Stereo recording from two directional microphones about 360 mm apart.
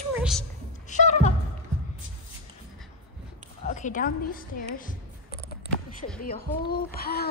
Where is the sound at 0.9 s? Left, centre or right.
Centre.